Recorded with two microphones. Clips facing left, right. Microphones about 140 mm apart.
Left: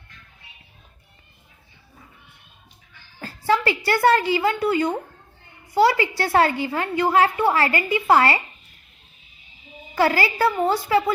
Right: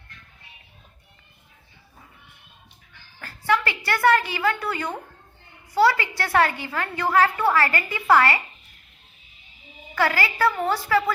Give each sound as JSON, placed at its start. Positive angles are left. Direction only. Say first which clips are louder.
{"t": 3.2, "sound": "a sound", "louder": "left 2 dB", "side_deg": 25}
{"t": 5.7, "sound": "a woman's voice", "louder": "left 2 dB", "side_deg": 25}
{"t": 9.9, "sound": "a woman's voice", "louder": "left 3 dB", "side_deg": 25}